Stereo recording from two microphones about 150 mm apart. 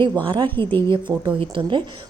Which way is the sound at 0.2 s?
35° right (ahead or behind).